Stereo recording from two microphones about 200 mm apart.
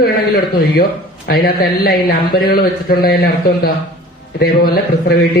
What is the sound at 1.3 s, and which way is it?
A man's voice, 50° left (ahead or behind).